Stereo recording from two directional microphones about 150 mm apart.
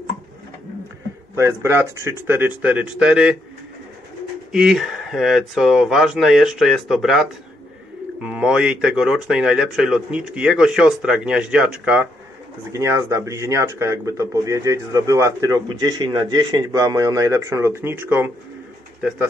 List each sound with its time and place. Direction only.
1.3 s speech: 20° right (ahead or behind)
4.5 s speech: 5° right (ahead or behind)
12.7 s speech: 20° right (ahead or behind)